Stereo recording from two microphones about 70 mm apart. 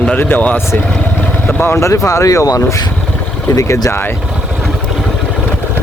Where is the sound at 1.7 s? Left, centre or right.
Left.